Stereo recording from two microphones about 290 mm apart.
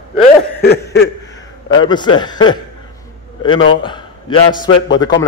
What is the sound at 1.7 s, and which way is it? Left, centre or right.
Speech, centre.